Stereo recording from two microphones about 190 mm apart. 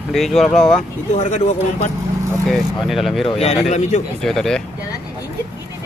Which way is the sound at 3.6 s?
35° left (ahead or behind).